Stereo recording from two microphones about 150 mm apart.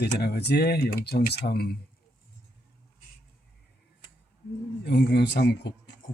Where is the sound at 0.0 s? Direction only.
90° left.